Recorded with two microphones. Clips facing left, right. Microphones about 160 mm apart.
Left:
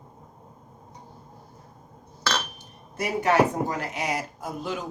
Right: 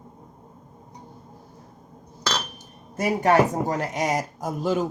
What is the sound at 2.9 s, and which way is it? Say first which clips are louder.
A man's voice: right 3 dB; 45° right (ahead or behind).